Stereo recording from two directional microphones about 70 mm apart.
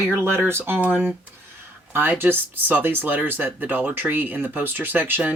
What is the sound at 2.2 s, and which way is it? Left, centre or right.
Speech, right.